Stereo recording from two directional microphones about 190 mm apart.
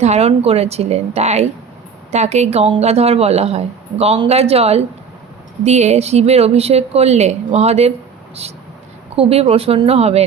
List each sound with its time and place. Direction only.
0.0 s speech: 35° right (ahead or behind)
9.1 s speech: 30° right (ahead or behind)